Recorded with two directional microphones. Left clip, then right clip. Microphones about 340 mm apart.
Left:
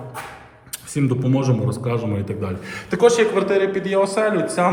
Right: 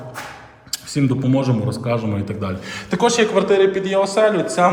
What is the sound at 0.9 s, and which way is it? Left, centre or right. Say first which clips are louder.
A man's voice: right 2 dB; centre.